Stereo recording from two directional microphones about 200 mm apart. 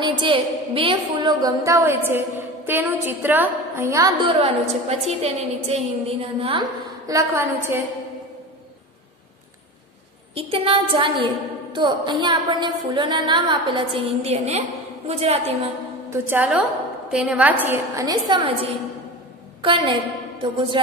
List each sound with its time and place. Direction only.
0.0 s a woman's voice: 25° right (ahead or behind)
7.1 s a woman's voice: 15° right (ahead or behind)
10.3 s a woman's voice: 25° right (ahead or behind)
16.1 s a woman's voice: 10° right (ahead or behind); by 20.8 s 25° right (ahead or behind)